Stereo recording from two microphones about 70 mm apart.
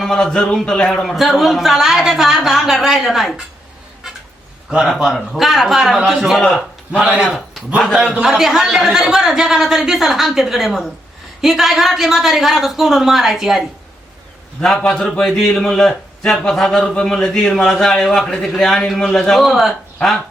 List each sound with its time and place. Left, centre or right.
0.0 s speech: centre
4.8 s a man's voice: centre
14.6 s a man's voice: centre